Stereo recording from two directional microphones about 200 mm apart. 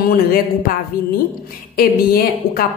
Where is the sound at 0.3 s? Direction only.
50° left (ahead or behind).